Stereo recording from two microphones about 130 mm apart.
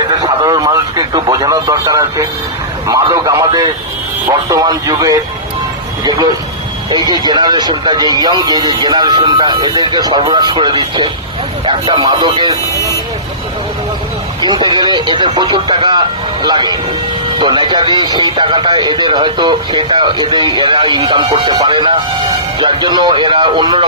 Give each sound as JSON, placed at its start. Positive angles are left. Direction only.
{"t": 0.1, "sound": "radio", "side_deg": -30}
{"t": 2.8, "sound": "speech", "side_deg": -25}
{"t": 6.9, "sound": "a man's voice", "side_deg": -35}
{"t": 14.4, "sound": "a man's voice", "side_deg": -35}